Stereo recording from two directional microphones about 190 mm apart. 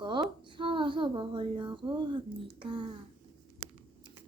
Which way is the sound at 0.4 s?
25° right (ahead or behind).